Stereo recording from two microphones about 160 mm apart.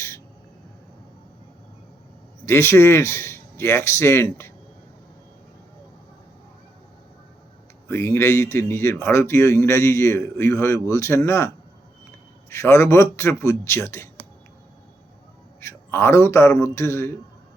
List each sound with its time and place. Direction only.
2.5 s speech: 15° left (ahead or behind)
7.9 s speech: 15° left (ahead or behind)
15.6 s a man's voice: 15° left (ahead or behind)